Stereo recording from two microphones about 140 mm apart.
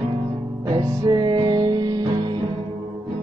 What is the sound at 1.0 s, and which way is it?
Music, 30° right (ahead or behind).